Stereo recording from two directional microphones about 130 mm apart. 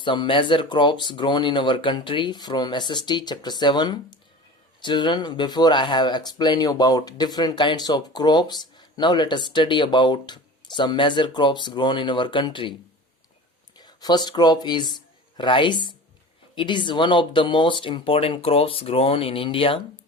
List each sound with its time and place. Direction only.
0.0 s speech: 40° left (ahead or behind)
13.7 s speech: 30° left (ahead or behind)